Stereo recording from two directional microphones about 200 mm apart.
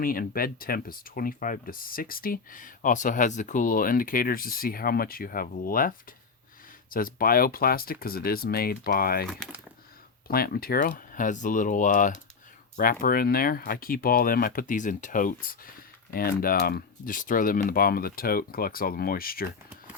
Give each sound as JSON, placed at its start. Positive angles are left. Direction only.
{"t": 0.0, "sound": "speech", "side_deg": 45}
{"t": 10.2, "sound": "speech", "side_deg": 50}